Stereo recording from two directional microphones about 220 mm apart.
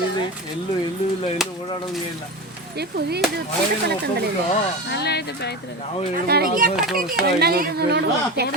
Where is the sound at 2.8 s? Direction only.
45° right (ahead or behind).